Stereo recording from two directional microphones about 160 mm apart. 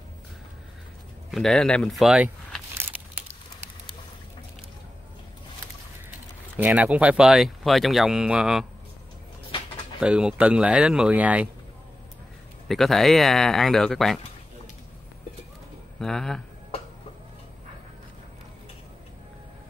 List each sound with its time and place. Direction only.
1.3 s a sound: 5° left (ahead or behind)
6.5 s speech: 10° right (ahead or behind)
9.9 s speech: 5° right (ahead or behind)
12.6 s speech: centre (ahead or behind)
16.0 s speech: 5° left (ahead or behind)
16.7 s a sound: 40° left (ahead or behind)